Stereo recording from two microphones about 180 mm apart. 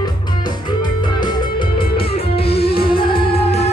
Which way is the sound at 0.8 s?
25° left (ahead or behind).